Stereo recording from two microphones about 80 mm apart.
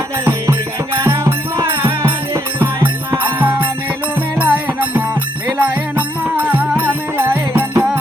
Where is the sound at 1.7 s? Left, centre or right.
Right.